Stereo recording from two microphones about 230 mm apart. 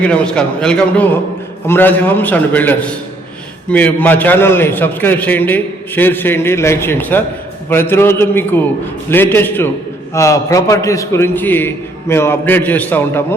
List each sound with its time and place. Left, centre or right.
0.0 s a man's voice: centre